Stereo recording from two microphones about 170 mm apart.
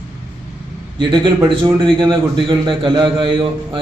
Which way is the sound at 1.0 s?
30° right (ahead or behind).